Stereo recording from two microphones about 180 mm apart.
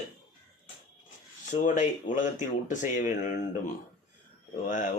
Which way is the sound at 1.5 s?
45° left (ahead or behind).